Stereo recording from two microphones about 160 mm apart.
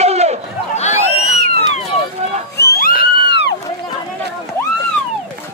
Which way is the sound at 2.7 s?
65° left (ahead or behind).